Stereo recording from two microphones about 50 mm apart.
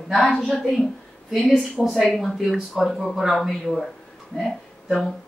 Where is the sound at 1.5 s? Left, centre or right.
Centre.